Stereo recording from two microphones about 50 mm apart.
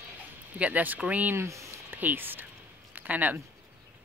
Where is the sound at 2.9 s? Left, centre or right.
Right.